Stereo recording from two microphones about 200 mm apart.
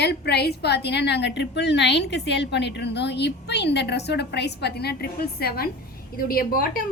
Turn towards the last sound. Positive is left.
turn(degrees=45)  # may be behind; listen again after turning